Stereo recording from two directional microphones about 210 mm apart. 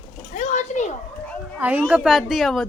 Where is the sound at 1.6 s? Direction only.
10° right (ahead or behind).